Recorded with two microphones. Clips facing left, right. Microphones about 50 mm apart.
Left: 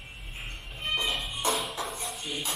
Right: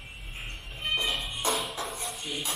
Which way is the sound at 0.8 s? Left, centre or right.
Centre.